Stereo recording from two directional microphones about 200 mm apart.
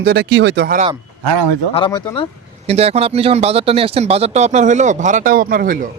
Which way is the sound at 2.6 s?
30° right (ahead or behind).